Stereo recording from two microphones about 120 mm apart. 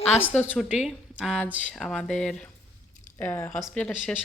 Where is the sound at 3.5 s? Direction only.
5° left (ahead or behind).